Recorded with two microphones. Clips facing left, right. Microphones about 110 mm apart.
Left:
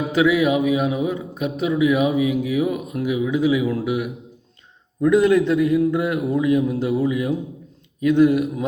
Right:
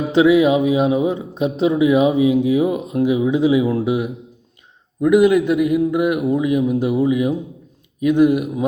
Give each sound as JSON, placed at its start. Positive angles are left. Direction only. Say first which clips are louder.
{"t": 0.1, "sound": "speech", "louder": "right 5 dB", "side_deg": -25}
{"t": 4.9, "sound": "speech", "louder": "right 2 dB", "side_deg": -15}